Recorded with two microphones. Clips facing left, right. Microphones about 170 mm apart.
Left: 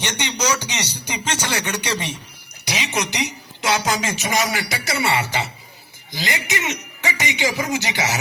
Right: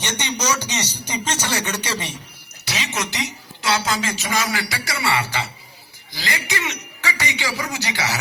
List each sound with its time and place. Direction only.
0.0 s speech: 10° left (ahead or behind)